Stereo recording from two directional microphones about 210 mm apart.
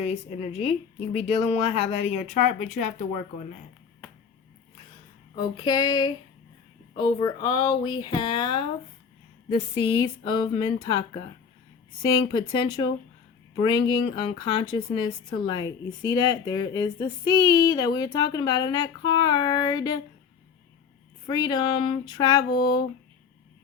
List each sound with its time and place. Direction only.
0.0 s speech: 30° left (ahead or behind)
5.4 s speech: 20° left (ahead or behind)
9.7 s speech: 25° left (ahead or behind)
21.2 s speech: 20° left (ahead or behind)